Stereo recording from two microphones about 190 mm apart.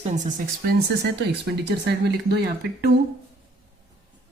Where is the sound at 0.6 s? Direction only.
50° right (ahead or behind).